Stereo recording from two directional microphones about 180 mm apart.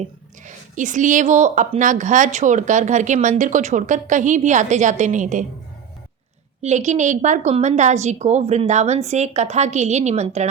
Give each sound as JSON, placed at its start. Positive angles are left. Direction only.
{"t": 0.4, "sound": "a woman's voice", "side_deg": -45}
{"t": 6.6, "sound": "a woman's voice", "side_deg": -40}